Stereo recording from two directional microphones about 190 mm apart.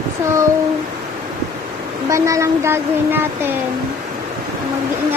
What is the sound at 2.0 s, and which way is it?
Speech, 15° right (ahead or behind).